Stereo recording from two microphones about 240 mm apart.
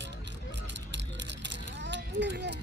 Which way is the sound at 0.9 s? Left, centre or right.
Right.